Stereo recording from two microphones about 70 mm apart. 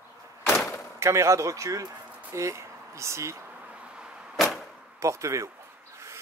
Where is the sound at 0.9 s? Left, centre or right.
Right.